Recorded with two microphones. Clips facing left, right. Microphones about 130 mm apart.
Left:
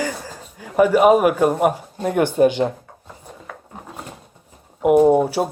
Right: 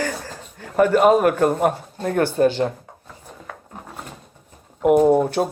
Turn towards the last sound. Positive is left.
turn(degrees=5)  # may be behind; listen again after turning